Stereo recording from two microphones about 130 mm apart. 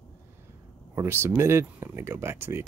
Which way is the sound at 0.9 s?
20° right (ahead or behind).